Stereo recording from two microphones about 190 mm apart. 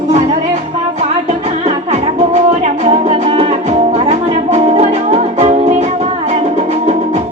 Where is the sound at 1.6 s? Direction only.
35° right (ahead or behind).